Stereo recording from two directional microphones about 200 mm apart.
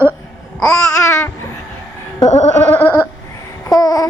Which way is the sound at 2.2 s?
35° left (ahead or behind).